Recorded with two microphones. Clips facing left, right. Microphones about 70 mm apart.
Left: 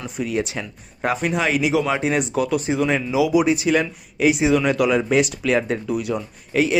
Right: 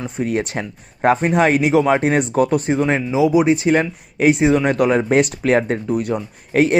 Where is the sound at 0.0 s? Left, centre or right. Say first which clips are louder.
Right 3 dB; right.